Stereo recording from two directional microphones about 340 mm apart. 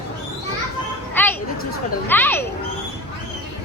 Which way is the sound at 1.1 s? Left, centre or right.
Centre.